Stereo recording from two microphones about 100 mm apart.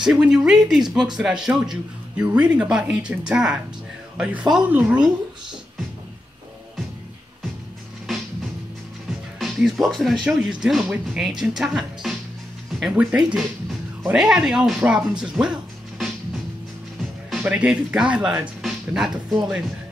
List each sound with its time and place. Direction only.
0.0 s speech: 5° right (ahead or behind)
8.1 s music: centre (ahead or behind)
9.4 s speech: centre (ahead or behind)
17.5 s speech: 10° right (ahead or behind)
18.6 s music: centre (ahead or behind)
19.1 s speech: 5° right (ahead or behind)